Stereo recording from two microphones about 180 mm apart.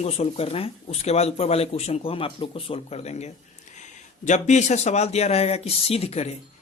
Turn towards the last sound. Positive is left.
turn(degrees=35)  # may be behind; listen again after turning